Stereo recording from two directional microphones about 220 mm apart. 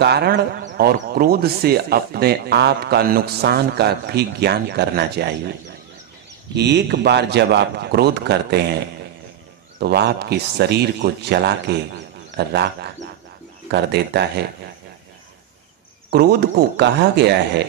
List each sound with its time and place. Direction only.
0.0 s speech: 50° right (ahead or behind)
6.5 s speech: 50° right (ahead or behind)
16.1 s speech: 45° right (ahead or behind)